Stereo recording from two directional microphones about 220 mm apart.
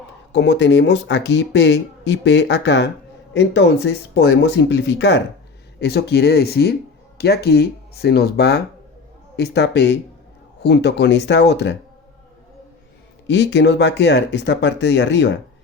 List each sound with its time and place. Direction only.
0.3 s speech: 50° left (ahead or behind)
13.2 s speech: 50° left (ahead or behind)